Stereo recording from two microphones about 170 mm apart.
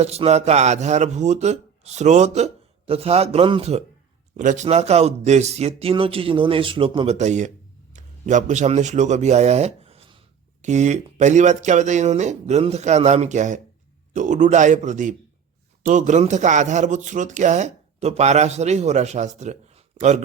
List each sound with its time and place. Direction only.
0.0 s a man's voice: 40° right (ahead or behind)